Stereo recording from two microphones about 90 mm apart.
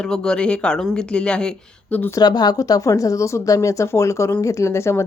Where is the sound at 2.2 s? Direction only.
50° left (ahead or behind).